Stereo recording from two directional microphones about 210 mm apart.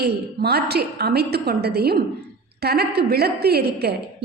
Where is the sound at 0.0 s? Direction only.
50° right (ahead or behind).